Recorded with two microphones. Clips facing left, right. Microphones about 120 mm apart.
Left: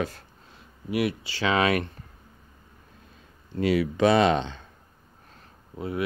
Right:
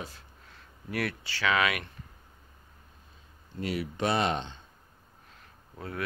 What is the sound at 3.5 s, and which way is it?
Speech, 90° left.